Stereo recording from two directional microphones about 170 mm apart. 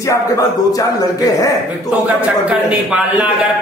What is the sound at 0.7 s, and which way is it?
Speech, 20° left (ahead or behind).